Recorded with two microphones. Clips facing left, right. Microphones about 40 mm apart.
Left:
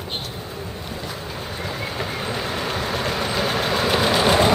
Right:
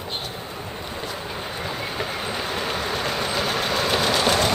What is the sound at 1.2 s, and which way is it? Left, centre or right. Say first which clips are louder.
Train: even; centre.